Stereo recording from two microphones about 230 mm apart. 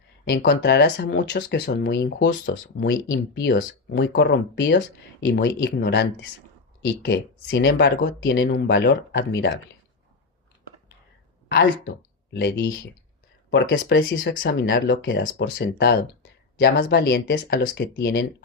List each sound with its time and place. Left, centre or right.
0.3 s speech: left
12.3 s speech: left